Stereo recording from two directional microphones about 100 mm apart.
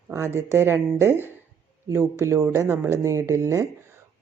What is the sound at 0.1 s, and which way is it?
Speech, 25° right (ahead or behind).